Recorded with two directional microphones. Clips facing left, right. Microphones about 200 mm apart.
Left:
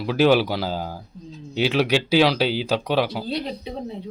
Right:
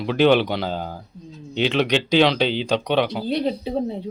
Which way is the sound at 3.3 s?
30° right (ahead or behind).